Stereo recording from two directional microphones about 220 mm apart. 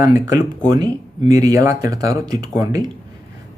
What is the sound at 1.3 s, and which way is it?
Speech, 15° right (ahead or behind).